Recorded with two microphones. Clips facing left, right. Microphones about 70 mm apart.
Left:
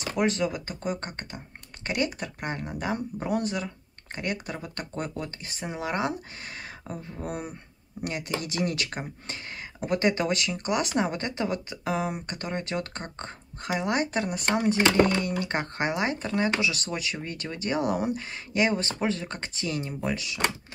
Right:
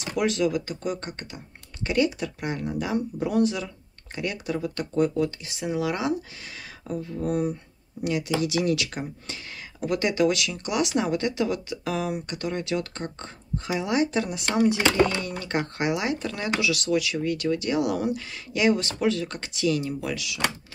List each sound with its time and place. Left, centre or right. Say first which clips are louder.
0.0 s speech: right 2 dB; left